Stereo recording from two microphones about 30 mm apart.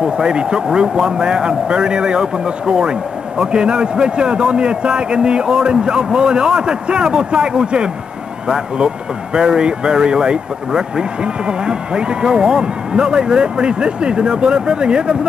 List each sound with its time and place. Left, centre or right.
0.0 s a man's voice: right